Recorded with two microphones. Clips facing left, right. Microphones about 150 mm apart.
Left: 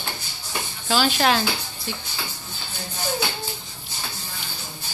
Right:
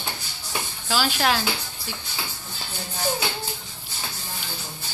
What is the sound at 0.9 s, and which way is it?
Speech, 5° right (ahead or behind).